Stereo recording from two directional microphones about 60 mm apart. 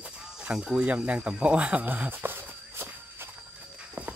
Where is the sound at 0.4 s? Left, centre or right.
Centre.